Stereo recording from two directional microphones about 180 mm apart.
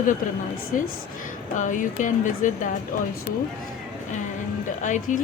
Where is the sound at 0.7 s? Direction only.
45° left (ahead or behind).